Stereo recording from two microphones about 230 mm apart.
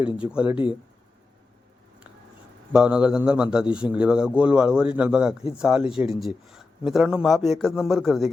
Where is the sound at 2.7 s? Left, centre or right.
Centre.